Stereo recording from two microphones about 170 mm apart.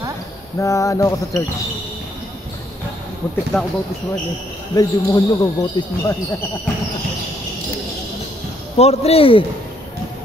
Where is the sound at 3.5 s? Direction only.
Centre (ahead or behind).